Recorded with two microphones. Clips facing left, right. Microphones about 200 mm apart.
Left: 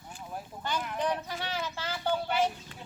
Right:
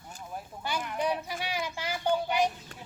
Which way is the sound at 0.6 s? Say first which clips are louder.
Right 1 dB; 10° right (ahead or behind).